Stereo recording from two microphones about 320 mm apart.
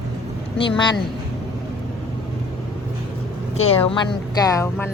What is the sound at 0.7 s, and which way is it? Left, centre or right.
Speech, centre.